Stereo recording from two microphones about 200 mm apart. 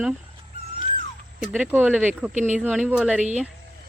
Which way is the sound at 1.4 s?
5° right (ahead or behind).